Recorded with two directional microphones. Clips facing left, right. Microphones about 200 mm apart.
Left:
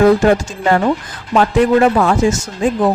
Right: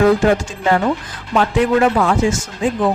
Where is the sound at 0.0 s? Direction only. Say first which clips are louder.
Left 3 dB; 45° left (ahead or behind).